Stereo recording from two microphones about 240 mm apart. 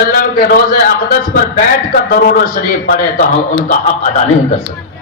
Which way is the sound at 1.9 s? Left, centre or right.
Left.